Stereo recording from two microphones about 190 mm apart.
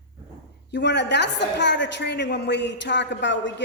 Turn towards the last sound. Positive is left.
turn(degrees=70)  # may be behind; listen again after turning